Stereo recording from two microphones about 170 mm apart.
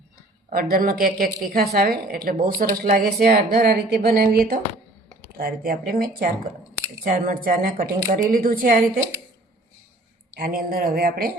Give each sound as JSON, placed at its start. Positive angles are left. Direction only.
{"t": 0.5, "sound": "a woman's voice", "side_deg": -60}
{"t": 10.4, "sound": "a woman's voice", "side_deg": -60}